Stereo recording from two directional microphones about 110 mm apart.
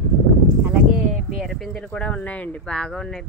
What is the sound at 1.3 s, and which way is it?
Speech, centre (ahead or behind).